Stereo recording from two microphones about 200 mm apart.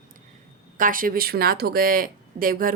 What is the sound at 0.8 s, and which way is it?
A woman's voice, 45° right (ahead or behind).